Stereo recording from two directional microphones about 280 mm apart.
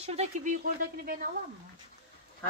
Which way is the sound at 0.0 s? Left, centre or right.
Right.